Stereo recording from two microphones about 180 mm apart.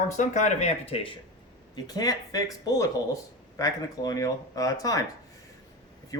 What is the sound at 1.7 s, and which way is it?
Speech, 20° left (ahead or behind).